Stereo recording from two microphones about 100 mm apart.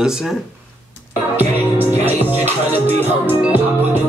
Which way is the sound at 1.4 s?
20° right (ahead or behind).